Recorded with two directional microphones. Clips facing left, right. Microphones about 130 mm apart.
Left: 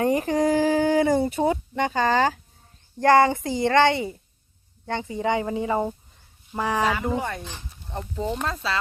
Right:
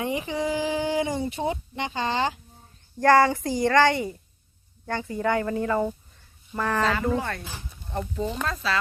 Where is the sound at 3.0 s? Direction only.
20° left (ahead or behind).